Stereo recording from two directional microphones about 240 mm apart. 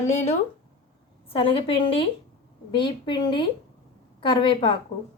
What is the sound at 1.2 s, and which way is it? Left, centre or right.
A woman's voice, left.